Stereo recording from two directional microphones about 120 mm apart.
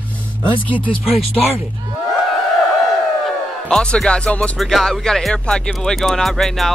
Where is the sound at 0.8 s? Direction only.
45° left (ahead or behind).